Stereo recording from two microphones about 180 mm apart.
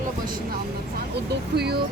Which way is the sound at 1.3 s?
65° right (ahead or behind).